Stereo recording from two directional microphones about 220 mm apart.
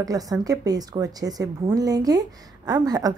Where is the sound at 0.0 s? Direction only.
15° right (ahead or behind).